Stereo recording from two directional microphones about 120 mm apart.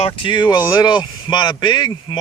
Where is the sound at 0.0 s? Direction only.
45° left (ahead or behind).